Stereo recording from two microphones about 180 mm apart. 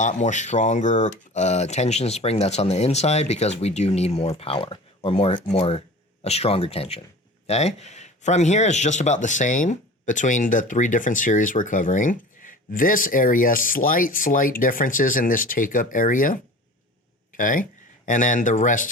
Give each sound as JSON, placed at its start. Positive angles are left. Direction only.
{"t": 0.0, "sound": "speech", "side_deg": 40}